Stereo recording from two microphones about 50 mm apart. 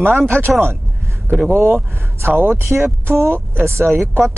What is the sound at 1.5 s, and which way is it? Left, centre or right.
Speech, right.